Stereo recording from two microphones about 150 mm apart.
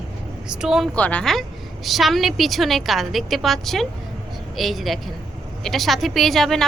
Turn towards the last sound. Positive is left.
turn(degrees=0)  # may be behind; listen again after turning